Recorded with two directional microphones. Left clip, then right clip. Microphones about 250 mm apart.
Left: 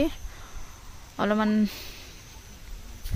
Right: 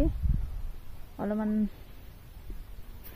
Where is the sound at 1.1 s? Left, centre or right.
Left.